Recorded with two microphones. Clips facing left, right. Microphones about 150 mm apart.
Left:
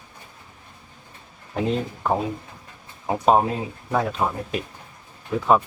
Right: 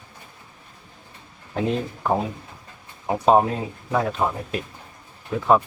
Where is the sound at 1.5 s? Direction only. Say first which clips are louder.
Even; centre (ahead or behind).